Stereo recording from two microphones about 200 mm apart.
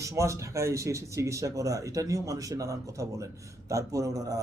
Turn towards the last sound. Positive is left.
turn(degrees=-15)  # may be behind; listen again after turning